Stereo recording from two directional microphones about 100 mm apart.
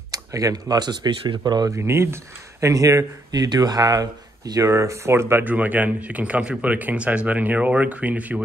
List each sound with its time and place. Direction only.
0.1 s speech: 35° right (ahead or behind)
1.8 s speech: 25° right (ahead or behind)